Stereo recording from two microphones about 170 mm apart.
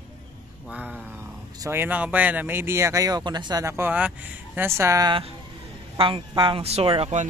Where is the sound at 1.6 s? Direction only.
15° right (ahead or behind).